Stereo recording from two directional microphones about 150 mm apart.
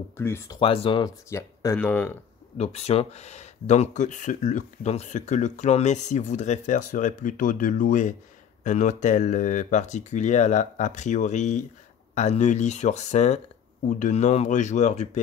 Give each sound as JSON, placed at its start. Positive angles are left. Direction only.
{"t": 0.2, "sound": "speech", "side_deg": 15}
{"t": 0.6, "sound": "speech", "side_deg": 35}
{"t": 1.0, "sound": "speech", "side_deg": 20}
{"t": 2.5, "sound": "speech", "side_deg": 45}